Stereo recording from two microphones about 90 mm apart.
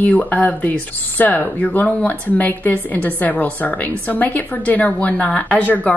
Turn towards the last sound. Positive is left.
turn(degrees=15)  # may be behind; listen again after turning